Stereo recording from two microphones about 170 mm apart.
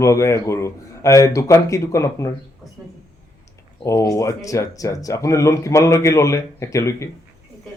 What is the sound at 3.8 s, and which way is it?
Speech, 20° left (ahead or behind).